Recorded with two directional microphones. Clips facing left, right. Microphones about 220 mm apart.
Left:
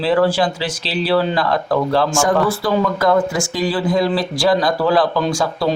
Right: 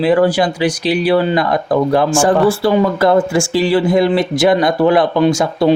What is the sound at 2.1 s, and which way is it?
Speech, 30° right (ahead or behind).